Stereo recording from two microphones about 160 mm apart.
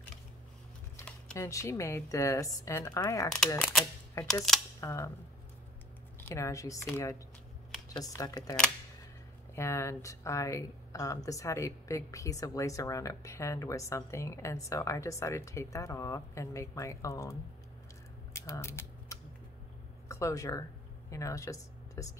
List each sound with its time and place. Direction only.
0.9 s typing: 10° left (ahead or behind)
1.5 s speech: 20° left (ahead or behind)
4.3 s speech: 5° left (ahead or behind)
4.7 s speech: 20° left (ahead or behind)
6.2 s speech: 20° left (ahead or behind)
9.6 s speech: 15° left (ahead or behind)
18.3 s typewriter: 20° left (ahead or behind)
20.1 s speech: 20° left (ahead or behind)